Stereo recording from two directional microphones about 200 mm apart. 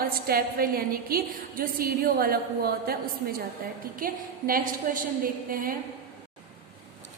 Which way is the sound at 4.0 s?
45° right (ahead or behind).